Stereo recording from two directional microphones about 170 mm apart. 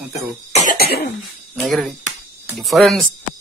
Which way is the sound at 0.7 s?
65° left (ahead or behind).